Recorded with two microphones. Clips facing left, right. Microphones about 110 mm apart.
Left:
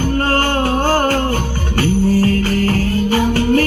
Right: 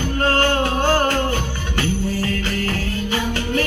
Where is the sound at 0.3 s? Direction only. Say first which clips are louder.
Left 2 dB; 45° left (ahead or behind).